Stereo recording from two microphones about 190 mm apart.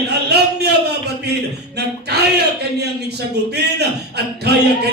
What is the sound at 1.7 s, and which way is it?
Speech, 60° right (ahead or behind).